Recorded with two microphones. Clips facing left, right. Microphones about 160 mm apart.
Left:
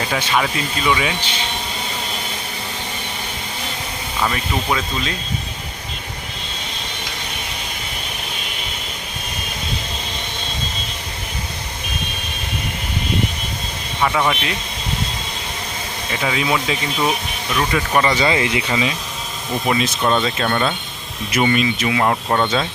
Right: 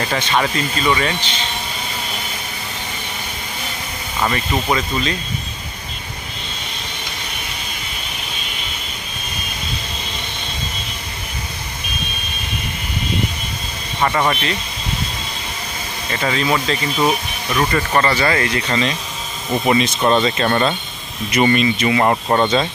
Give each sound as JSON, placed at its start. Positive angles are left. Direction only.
{"t": 0.0, "sound": "speech", "side_deg": 5}
{"t": 4.2, "sound": "speech", "side_deg": 0}
{"t": 14.0, "sound": "speech", "side_deg": 0}
{"t": 16.1, "sound": "speech", "side_deg": 5}
{"t": 17.1, "sound": "speech", "side_deg": -10}
{"t": 17.7, "sound": "speech", "side_deg": 5}
{"t": 18.1, "sound": "speech", "side_deg": 15}